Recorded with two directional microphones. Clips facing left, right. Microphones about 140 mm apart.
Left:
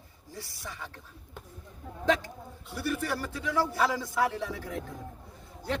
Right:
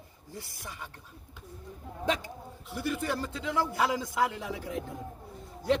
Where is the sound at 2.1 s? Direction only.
15° right (ahead or behind).